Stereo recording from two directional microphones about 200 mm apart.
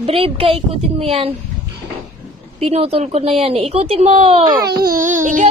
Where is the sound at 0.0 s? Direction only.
30° right (ahead or behind).